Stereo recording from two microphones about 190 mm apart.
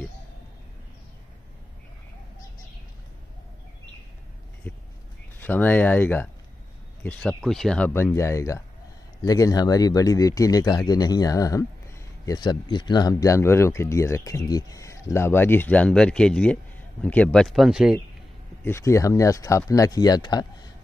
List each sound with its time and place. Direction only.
5.4 s speech: 10° left (ahead or behind)
18.6 s speech: 15° left (ahead or behind)